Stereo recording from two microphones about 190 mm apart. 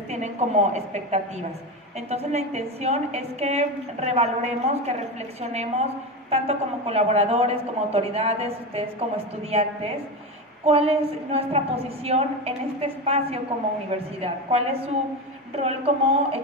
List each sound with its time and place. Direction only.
0.1 s a woman's voice: 35° right (ahead or behind)